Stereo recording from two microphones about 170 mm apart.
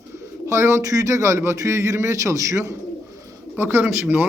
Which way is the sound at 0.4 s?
15° right (ahead or behind).